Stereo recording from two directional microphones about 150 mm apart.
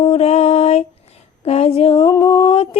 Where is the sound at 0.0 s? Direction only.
45° left (ahead or behind).